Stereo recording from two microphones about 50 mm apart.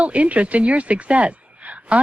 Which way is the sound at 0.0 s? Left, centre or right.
Right.